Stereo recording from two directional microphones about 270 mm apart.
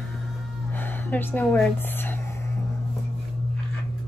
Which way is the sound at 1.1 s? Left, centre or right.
Centre.